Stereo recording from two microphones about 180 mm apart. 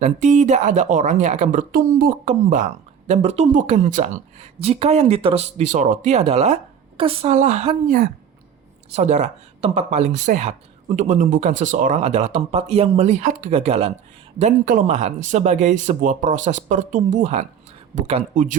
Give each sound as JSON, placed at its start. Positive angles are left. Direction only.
{"t": 0.0, "sound": "speech", "side_deg": -40}
{"t": 7.9, "sound": "speech", "side_deg": -55}
{"t": 8.9, "sound": "speech", "side_deg": -40}